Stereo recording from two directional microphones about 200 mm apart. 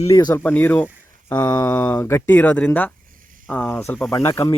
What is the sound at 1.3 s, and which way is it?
A man's voice, 20° left (ahead or behind).